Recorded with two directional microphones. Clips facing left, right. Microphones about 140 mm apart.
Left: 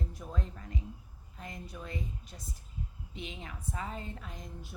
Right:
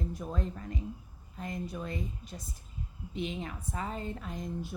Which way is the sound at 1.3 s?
45° right (ahead or behind).